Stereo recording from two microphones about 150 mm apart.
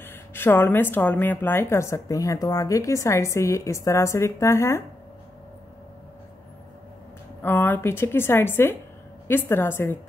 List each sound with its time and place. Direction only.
0.0 s a woman's voice: 15° left (ahead or behind)
7.4 s a woman's voice: 15° left (ahead or behind)